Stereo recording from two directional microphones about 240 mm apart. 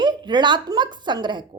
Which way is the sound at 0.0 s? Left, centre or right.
Centre.